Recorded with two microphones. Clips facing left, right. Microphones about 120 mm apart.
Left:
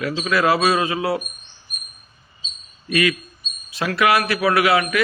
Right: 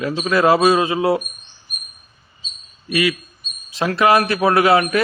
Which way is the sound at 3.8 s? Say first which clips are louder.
Right 3 dB; 30° right (ahead or behind).